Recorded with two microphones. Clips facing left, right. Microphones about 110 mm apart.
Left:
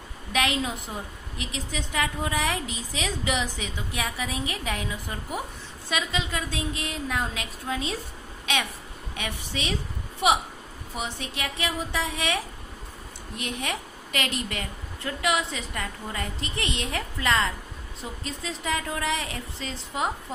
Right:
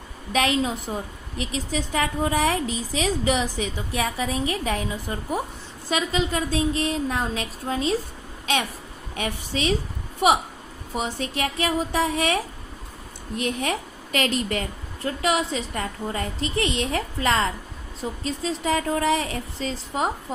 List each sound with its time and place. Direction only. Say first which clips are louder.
0.3 s a woman's voice: right 4 dB; 35° right (ahead or behind)
9.1 s a woman's voice: right 5 dB; 40° right (ahead or behind)
11.0 s a woman's voice: right 6 dB; 40° right (ahead or behind)
13.4 s a woman's voice: right 6 dB; 40° right (ahead or behind)